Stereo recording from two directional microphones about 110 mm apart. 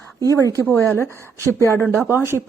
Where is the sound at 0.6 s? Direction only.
15° left (ahead or behind).